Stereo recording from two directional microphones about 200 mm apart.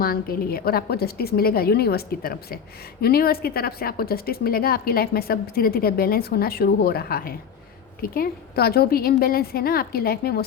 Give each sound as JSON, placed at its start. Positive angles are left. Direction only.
{"t": 0.0, "sound": "a woman's voice", "side_deg": 45}